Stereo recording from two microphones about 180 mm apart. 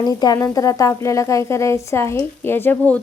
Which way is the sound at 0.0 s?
20° left (ahead or behind).